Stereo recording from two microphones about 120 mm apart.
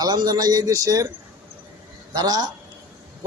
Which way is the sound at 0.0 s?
35° right (ahead or behind).